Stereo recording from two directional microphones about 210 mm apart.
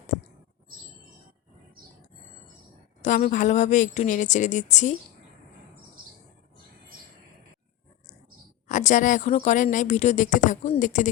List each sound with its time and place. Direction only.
3.0 s a woman's voice: 35° left (ahead or behind)
8.6 s a woman's voice: 35° left (ahead or behind)